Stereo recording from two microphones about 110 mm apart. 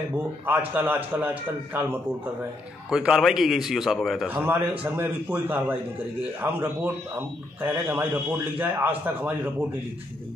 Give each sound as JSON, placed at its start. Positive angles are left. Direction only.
{"t": 0.5, "sound": "a man's voice", "side_deg": -15}
{"t": 2.9, "sound": "a man's voice", "side_deg": -5}
{"t": 4.3, "sound": "a man's voice", "side_deg": -20}